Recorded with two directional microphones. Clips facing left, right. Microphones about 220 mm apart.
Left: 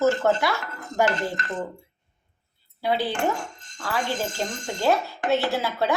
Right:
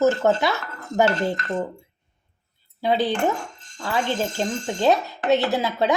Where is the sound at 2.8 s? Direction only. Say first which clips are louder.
Right 3 dB; 20° right (ahead or behind).